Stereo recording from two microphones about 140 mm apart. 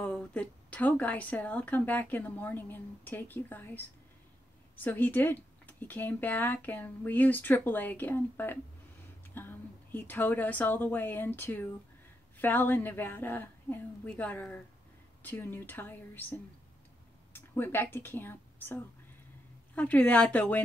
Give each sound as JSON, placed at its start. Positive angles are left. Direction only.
{"t": 0.0, "sound": "a woman's voice", "side_deg": 5}